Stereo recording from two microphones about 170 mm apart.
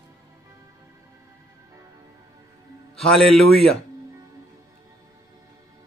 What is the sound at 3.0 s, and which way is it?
Speech, centre (ahead or behind).